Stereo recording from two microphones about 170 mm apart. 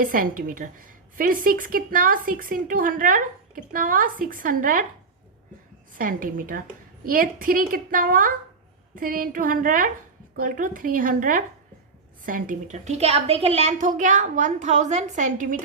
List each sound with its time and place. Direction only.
0.0 s a woman's voice: 55° right (ahead or behind)
6.0 s a woman's voice: 55° right (ahead or behind)